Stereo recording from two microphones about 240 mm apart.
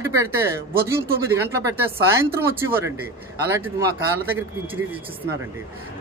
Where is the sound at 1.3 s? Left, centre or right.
Centre.